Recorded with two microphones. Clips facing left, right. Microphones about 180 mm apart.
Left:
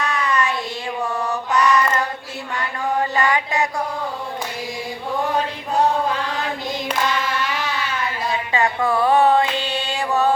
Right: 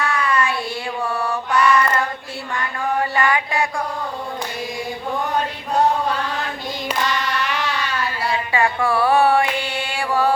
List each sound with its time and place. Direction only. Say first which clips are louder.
0.0 s child singing: right 1 dB; 20° left (ahead or behind)
1.2 s mantra: right 1 dB; 20° left (ahead or behind)
3.0 s music: even; 20° left (ahead or behind)
7.9 s music: right 1 dB; 20° left (ahead or behind)